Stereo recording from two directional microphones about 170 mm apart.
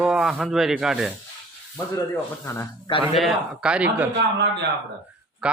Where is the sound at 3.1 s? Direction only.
Centre (ahead or behind).